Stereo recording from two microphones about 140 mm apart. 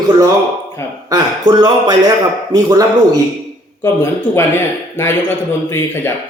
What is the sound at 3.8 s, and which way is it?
A man's voice, 15° left (ahead or behind).